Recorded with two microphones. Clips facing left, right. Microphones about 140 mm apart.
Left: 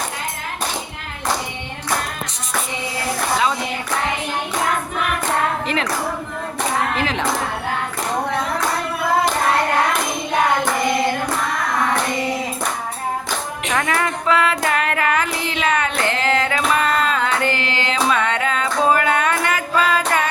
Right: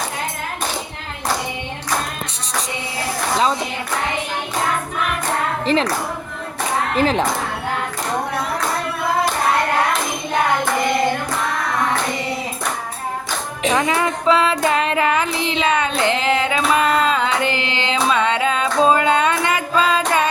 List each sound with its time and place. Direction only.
5.6 s speech: 30° right (ahead or behind)
6.9 s speech: 40° right (ahead or behind)
13.7 s child singing: 20° right (ahead or behind)